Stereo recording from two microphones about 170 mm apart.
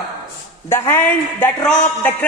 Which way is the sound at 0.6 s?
15° left (ahead or behind).